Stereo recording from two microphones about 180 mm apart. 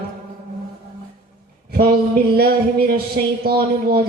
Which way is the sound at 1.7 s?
60° right (ahead or behind).